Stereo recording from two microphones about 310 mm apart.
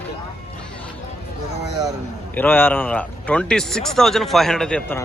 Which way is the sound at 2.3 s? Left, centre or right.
Centre.